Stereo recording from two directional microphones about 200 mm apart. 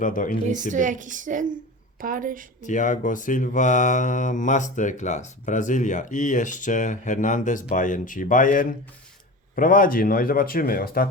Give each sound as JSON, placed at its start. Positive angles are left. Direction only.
{"t": 0.0, "sound": "speech", "side_deg": 40}
{"t": 0.7, "sound": "a woman's voice", "side_deg": -40}
{"t": 2.6, "sound": "speech", "side_deg": 40}